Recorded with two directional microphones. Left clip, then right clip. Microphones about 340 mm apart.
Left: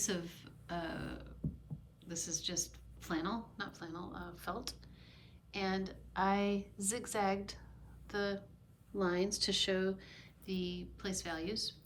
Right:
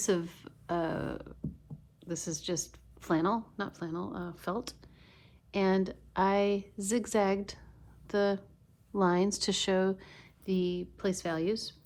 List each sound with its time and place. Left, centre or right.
0.0 s a woman's voice: centre